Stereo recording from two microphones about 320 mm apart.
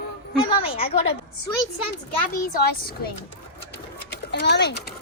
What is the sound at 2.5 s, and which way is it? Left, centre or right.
Speech, left.